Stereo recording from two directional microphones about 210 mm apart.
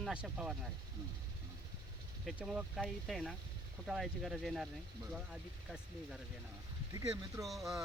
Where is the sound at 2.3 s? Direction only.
5° right (ahead or behind).